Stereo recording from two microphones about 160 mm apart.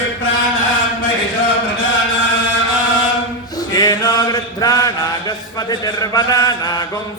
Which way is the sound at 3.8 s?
25° left (ahead or behind).